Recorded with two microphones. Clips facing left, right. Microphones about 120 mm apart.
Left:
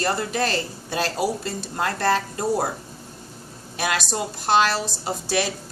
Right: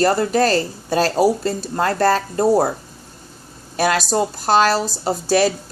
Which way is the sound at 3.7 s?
40° right (ahead or behind).